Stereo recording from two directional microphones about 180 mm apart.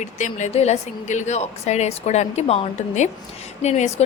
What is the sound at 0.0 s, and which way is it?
A woman's voice, 40° left (ahead or behind).